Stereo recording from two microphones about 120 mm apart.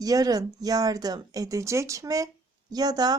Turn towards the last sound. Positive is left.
turn(degrees=-35)  # may be behind; listen again after turning